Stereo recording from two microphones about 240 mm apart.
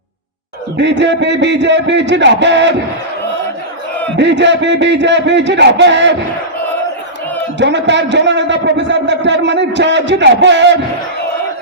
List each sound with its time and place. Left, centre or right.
0.8 s a man's voice: right
4.2 s a man's voice: right
7.6 s a man's voice: right